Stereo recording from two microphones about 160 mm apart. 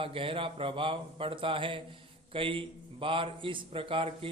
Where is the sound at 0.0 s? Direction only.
35° right (ahead or behind).